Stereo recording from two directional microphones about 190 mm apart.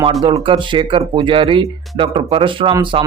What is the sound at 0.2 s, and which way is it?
Speech, 20° right (ahead or behind).